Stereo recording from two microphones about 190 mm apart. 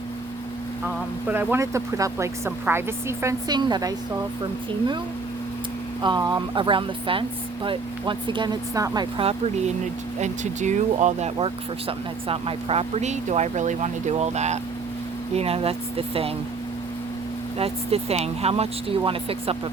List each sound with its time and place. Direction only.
1.3 s speech: 10° right (ahead or behind)
6.0 s speech: 20° right (ahead or behind)
17.6 s speech: 30° right (ahead or behind)